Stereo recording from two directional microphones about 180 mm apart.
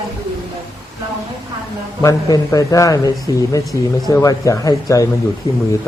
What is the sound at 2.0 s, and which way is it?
A man's voice, 20° left (ahead or behind).